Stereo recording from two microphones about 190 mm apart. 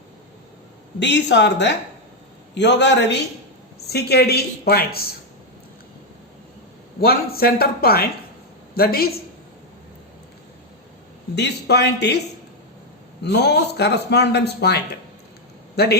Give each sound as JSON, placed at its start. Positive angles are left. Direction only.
{"t": 0.9, "sound": "a man's voice", "side_deg": 65}
{"t": 7.0, "sound": "a man's voice", "side_deg": 55}
{"t": 11.3, "sound": "a man's voice", "side_deg": 60}
{"t": 13.2, "sound": "a man's voice", "side_deg": 60}